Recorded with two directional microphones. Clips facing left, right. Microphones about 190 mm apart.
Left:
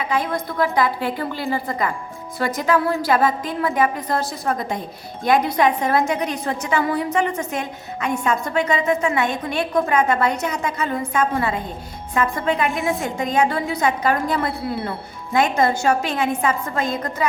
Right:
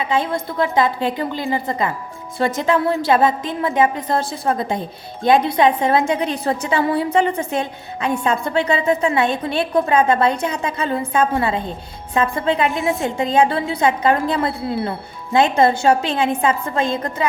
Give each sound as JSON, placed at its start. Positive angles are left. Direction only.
{"t": 0.0, "sound": "a woman's voice", "side_deg": -25}
{"t": 12.7, "sound": "a woman's voice", "side_deg": 0}
{"t": 13.1, "sound": "a woman's voice", "side_deg": -30}